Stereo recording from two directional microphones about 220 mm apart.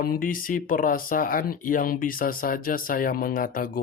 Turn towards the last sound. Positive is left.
turn(degrees=40)  # may be behind; listen again after turning